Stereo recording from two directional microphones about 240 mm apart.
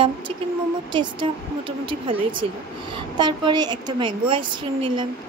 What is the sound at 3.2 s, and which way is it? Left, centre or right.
A woman's voice, centre.